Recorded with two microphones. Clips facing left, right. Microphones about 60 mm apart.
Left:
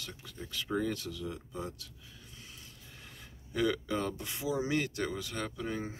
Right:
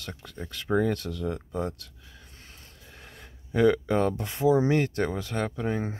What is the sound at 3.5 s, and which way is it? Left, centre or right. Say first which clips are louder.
Speech: right 9 dB; right.